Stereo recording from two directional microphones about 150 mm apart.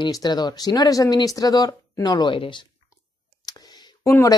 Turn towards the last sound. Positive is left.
turn(degrees=20)  # may be behind; listen again after turning